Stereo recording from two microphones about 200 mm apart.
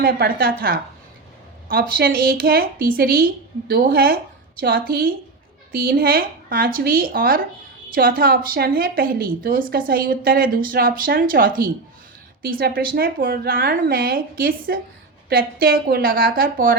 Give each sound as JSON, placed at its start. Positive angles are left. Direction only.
{"t": 0.0, "sound": "a woman's voice", "side_deg": -50}
{"t": 1.6, "sound": "a woman's voice", "side_deg": -45}